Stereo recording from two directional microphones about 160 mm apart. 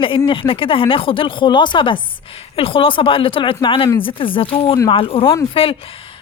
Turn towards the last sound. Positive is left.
turn(degrees=35)  # may be behind; listen again after turning